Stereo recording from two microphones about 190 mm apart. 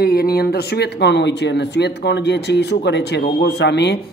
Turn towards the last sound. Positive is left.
turn(degrees=60)  # may be behind; listen again after turning